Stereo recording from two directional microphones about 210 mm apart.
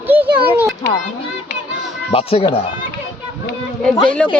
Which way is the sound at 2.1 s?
25° left (ahead or behind).